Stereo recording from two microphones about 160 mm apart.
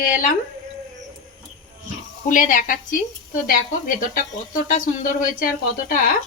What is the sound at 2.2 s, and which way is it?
A woman's voice, 55° left (ahead or behind).